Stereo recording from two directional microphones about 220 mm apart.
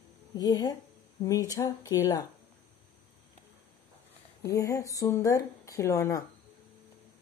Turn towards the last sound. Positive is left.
turn(degrees=15)  # may be behind; listen again after turning